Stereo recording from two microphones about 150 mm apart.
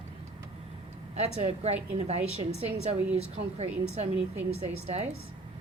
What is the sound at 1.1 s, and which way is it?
A woman's voice, 45° right (ahead or behind).